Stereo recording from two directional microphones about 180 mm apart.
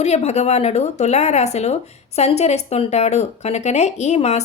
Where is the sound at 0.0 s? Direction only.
40° left (ahead or behind).